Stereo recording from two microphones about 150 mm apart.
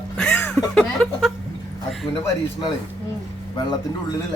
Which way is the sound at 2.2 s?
30° left (ahead or behind).